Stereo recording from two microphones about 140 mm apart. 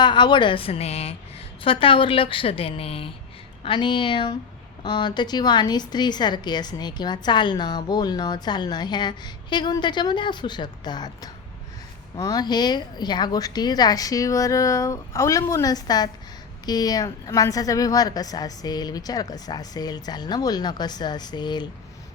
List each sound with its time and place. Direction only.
0.0 s a woman's voice: 35° left (ahead or behind)